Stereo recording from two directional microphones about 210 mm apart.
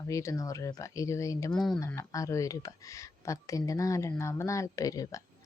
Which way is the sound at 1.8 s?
15° left (ahead or behind).